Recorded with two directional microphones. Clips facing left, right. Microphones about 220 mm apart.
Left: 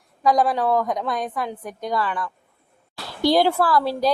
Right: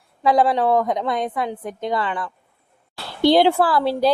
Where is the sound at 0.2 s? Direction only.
25° right (ahead or behind).